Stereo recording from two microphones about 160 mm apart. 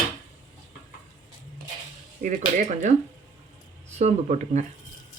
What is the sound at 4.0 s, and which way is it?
Speech, 45° right (ahead or behind).